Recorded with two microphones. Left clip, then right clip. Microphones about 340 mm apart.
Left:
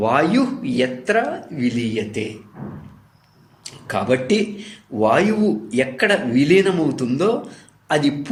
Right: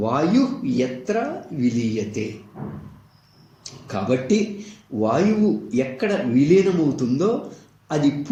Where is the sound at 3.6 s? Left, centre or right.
Left.